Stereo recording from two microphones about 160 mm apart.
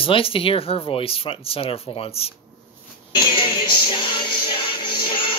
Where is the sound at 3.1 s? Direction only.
30° left (ahead or behind).